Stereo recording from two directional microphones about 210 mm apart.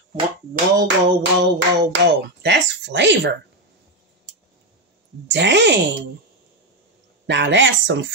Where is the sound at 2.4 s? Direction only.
55° right (ahead or behind).